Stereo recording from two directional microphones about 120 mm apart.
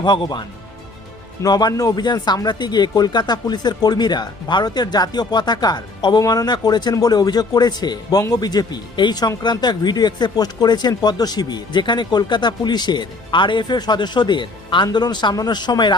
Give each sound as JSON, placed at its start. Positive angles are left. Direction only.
{"t": 0.0, "sound": "speech", "side_deg": 40}